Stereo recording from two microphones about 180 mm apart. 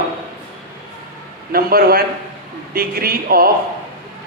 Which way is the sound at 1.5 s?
55° right (ahead or behind).